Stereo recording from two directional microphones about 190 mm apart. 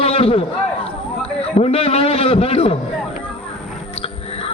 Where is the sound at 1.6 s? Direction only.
30° left (ahead or behind).